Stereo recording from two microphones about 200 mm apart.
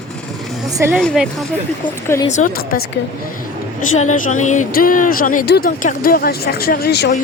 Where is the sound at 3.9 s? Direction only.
35° left (ahead or behind).